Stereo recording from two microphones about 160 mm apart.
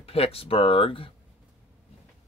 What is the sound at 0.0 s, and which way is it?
Speech, 35° left (ahead or behind).